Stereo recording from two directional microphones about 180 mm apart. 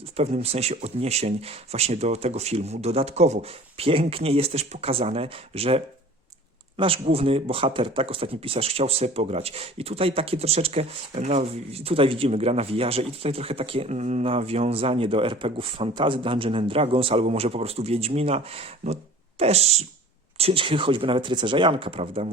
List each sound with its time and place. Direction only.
0.2 s speech: 35° right (ahead or behind)